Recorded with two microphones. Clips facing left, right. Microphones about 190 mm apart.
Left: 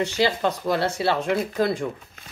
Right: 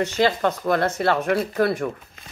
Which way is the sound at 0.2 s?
10° left (ahead or behind).